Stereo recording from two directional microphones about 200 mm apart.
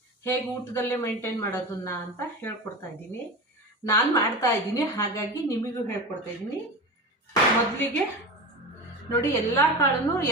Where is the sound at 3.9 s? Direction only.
15° left (ahead or behind).